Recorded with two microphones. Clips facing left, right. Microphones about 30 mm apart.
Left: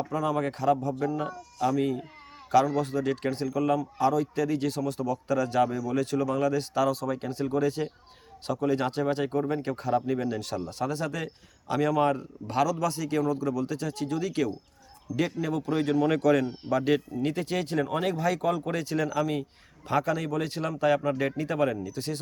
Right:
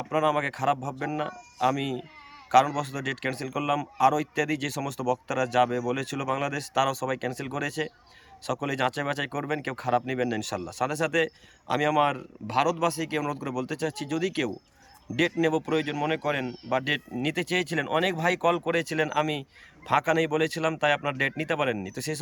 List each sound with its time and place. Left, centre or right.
0.1 s speech: right
7.5 s speech: right
8.4 s speech: right
10.7 s speech: right
15.8 s speech: right
16.0 s speech: right
16.6 s speech: right
17.2 s speech: right
19.9 s speech: right
21.2 s speech: right